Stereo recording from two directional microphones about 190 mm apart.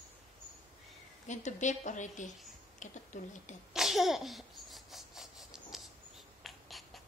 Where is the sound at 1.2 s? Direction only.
40° left (ahead or behind).